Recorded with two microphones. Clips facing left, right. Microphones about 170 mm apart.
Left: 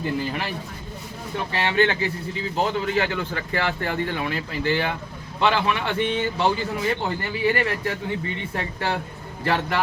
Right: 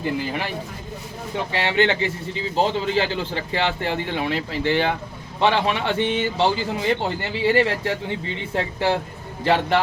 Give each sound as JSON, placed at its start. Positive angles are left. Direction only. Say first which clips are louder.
{"t": 1.5, "sound": "speech", "louder": "right 1 dB", "side_deg": -20}